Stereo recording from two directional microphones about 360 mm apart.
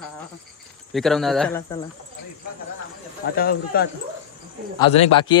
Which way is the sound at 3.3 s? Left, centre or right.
Left.